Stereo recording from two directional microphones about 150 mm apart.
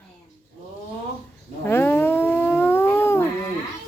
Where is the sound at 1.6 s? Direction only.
15° left (ahead or behind).